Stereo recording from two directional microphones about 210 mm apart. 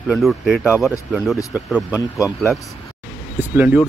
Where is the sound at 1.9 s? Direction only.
15° left (ahead or behind).